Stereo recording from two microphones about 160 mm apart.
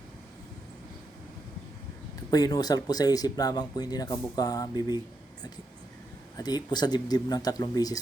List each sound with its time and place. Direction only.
2.3 s speech: 25° left (ahead or behind)
6.3 s speech: 25° left (ahead or behind)